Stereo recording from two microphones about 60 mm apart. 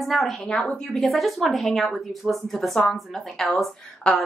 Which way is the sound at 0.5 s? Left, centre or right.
Centre.